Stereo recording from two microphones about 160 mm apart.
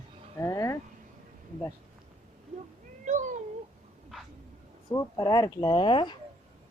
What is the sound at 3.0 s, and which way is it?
Cat, 50° right (ahead or behind).